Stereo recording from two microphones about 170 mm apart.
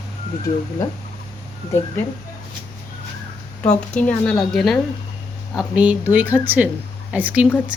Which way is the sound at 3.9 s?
5° left (ahead or behind).